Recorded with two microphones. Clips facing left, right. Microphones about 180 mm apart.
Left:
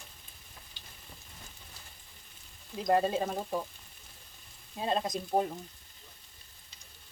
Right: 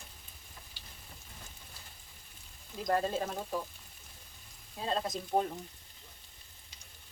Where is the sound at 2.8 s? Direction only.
15° left (ahead or behind).